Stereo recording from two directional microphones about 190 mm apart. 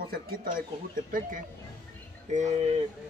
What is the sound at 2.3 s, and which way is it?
Speech, 40° right (ahead or behind).